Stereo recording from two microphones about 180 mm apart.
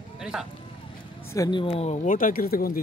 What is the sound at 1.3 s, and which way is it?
Speech, 20° left (ahead or behind).